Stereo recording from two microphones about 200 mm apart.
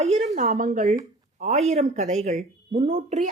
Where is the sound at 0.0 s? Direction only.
35° right (ahead or behind).